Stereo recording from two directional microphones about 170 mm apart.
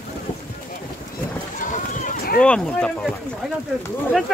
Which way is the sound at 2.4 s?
5° left (ahead or behind).